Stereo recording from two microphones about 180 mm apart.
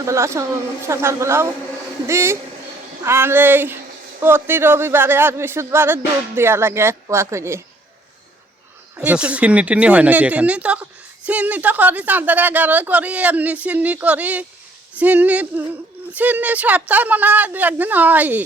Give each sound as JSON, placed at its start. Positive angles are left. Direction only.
{"t": 0.0, "sound": "a woman's voice", "side_deg": -15}
{"t": 9.0, "sound": "a woman's voice", "side_deg": -5}